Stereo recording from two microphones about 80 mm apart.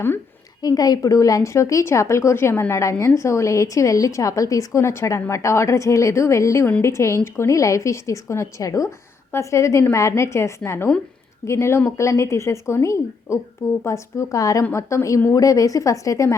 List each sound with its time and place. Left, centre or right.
0.6 s a woman's voice: left